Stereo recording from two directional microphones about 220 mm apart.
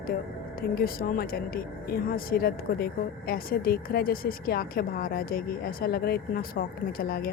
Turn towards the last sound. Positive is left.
turn(degrees=40)  # may be behind; listen again after turning